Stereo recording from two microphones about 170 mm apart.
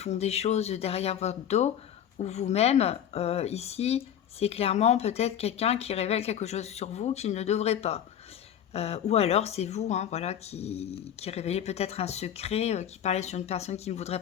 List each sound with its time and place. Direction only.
0.0 s speech: 40° left (ahead or behind)